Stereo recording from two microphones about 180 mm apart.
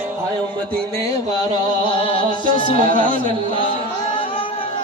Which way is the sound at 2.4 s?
50° right (ahead or behind).